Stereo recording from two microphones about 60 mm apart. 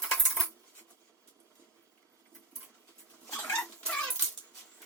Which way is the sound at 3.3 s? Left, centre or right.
Left.